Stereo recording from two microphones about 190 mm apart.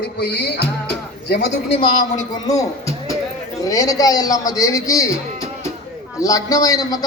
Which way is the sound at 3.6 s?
20° left (ahead or behind).